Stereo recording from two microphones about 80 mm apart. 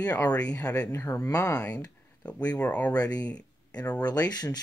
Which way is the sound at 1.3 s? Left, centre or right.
Left.